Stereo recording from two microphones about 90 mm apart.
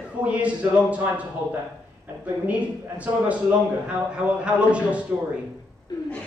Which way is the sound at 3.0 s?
15° right (ahead or behind).